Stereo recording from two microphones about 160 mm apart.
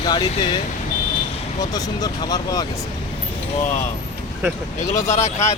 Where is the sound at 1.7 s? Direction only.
25° left (ahead or behind).